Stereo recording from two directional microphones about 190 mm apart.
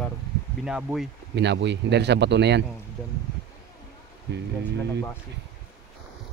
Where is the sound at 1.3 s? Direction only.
65° right (ahead or behind).